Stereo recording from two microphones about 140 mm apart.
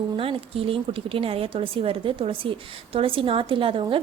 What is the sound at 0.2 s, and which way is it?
Speech, 40° right (ahead or behind).